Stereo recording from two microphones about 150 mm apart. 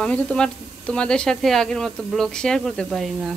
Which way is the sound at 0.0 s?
5° left (ahead or behind).